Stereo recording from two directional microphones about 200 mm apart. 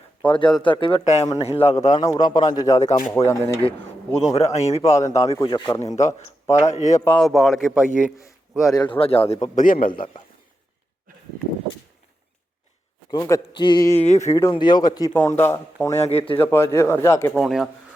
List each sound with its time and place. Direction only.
0.3 s a man's voice: 25° left (ahead or behind)
1.9 s a man's voice: 20° left (ahead or behind)
4.4 s speech: 35° left (ahead or behind)
5.4 s a man's voice: 20° left (ahead or behind)
6.0 s speech: 35° left (ahead or behind)
7.0 s a man's voice: 5° left (ahead or behind)
8.6 s a man's voice: 20° left (ahead or behind); by 10.1 s 45° left (ahead or behind)
13.1 s a man's voice: 15° left (ahead or behind)
14.0 s speech: 35° left (ahead or behind)
14.3 s a man's voice: 15° left (ahead or behind)
16.0 s a man's voice: 30° left (ahead or behind)
16.4 s a man's voice: 10° left (ahead or behind)
17.3 s a man's voice: centre (ahead or behind)